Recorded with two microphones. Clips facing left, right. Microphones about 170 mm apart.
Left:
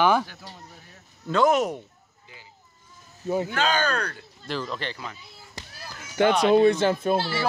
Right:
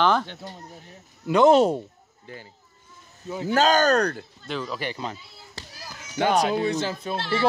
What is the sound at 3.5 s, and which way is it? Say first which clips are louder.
Speech: right 6 dB; 40° right (ahead or behind).